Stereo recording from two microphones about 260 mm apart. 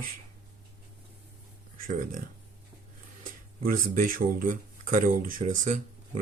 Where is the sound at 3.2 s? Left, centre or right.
Right.